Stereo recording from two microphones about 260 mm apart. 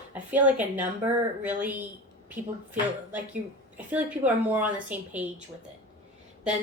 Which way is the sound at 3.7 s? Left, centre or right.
Centre.